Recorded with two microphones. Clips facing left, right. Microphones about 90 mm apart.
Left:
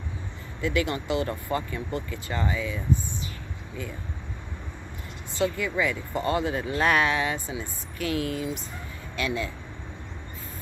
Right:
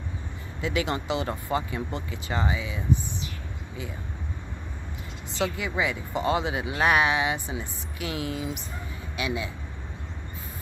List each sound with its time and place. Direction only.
0.6 s speech: 20° right (ahead or behind)
5.4 s speech: 20° right (ahead or behind)